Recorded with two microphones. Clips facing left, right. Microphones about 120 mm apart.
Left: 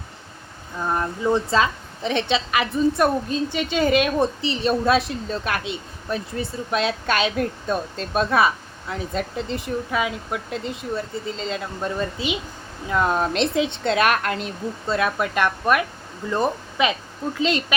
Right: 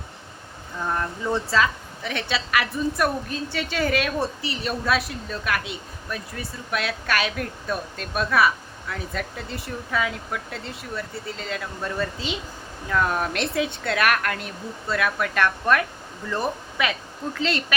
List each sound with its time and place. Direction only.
0.9 s a woman's voice: 20° left (ahead or behind)